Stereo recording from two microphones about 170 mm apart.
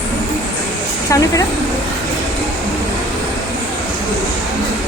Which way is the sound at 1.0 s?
20° left (ahead or behind).